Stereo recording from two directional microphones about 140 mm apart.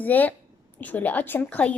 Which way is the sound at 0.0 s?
10° left (ahead or behind).